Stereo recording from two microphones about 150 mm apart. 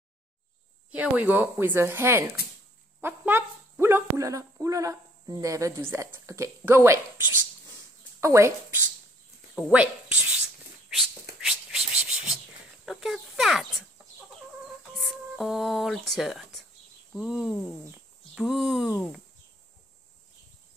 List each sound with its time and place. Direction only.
0.9 s speech: 10° right (ahead or behind)
10.9 s a sound: centre (ahead or behind)
12.8 s speech: centre (ahead or behind)
15.0 s speech: centre (ahead or behind)